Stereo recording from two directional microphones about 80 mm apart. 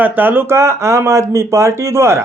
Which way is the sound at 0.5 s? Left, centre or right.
Right.